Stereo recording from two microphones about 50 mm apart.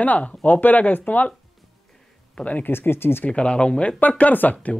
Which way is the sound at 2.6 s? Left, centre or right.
Left.